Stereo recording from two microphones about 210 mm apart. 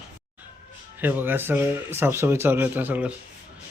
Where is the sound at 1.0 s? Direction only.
10° right (ahead or behind).